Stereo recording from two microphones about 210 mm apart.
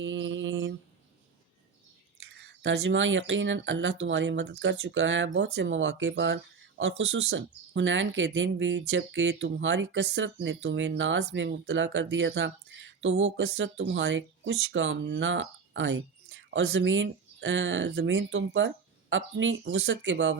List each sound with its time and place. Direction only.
0.0 s mantra: 65° right (ahead or behind)
2.3 s speech: 60° right (ahead or behind)